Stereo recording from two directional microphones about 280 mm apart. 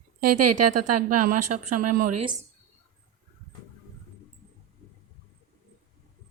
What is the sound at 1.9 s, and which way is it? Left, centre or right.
Speech, right.